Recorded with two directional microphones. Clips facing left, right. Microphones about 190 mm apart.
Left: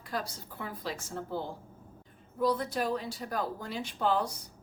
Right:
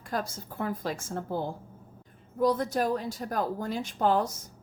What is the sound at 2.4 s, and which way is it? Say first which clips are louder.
A woman's voice: right 4 dB; 45° right (ahead or behind).